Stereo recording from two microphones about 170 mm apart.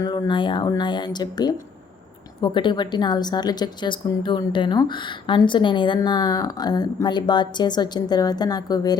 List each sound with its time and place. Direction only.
0.0 s a woman's voice: 25° left (ahead or behind)